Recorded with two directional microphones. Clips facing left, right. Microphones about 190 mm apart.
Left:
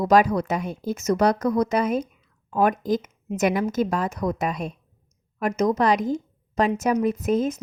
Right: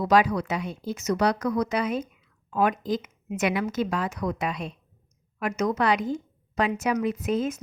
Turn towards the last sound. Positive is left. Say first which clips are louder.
# left 4 dB
turn(degrees=40)  # may be behind; listen again after turning